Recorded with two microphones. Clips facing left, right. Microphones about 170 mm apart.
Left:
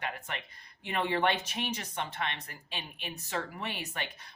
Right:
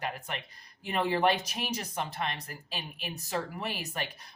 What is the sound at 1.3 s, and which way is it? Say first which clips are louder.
Speech: right 1 dB; 35° right (ahead or behind).